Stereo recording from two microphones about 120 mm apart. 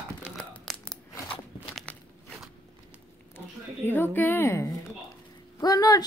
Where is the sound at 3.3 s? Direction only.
20° left (ahead or behind).